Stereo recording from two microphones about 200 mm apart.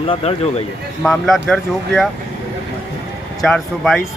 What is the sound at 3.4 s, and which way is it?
Speech, centre (ahead or behind).